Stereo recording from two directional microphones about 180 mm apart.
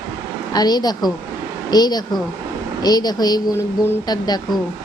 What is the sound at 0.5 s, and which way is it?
A woman's voice, 20° left (ahead or behind).